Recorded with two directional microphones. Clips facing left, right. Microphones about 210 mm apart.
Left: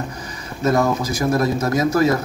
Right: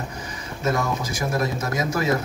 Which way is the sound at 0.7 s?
35° left (ahead or behind).